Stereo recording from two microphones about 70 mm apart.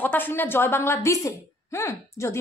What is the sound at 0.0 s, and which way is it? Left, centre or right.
A woman's voice, left.